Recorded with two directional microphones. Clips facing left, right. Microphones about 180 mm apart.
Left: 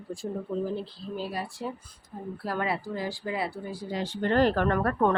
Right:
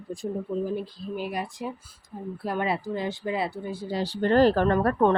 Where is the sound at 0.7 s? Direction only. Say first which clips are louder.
Right 3 dB; 15° right (ahead or behind); by 5.1 s 30° right (ahead or behind).